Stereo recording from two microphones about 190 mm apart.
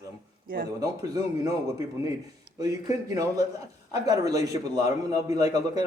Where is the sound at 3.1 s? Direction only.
20° right (ahead or behind).